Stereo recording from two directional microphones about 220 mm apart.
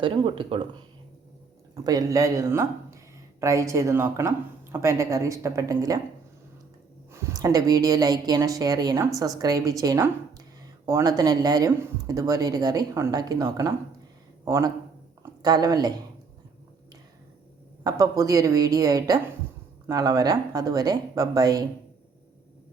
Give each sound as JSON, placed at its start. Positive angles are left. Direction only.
{"t": 0.0, "sound": "speech", "side_deg": -20}
{"t": 7.1, "sound": "speech", "side_deg": -10}
{"t": 17.8, "sound": "speech", "side_deg": -15}